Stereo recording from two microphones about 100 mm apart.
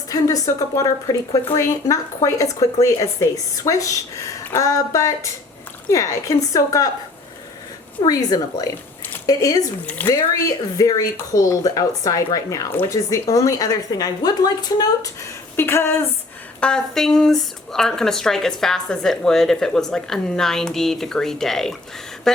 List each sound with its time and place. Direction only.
0.1 s speech: 35° left (ahead or behind)
8.0 s speech: 40° left (ahead or behind)
10.0 s speech: 15° left (ahead or behind)
10.8 s speech: 35° left (ahead or behind)
15.5 s speech: 25° left (ahead or behind)
16.6 s speech: 10° left (ahead or behind)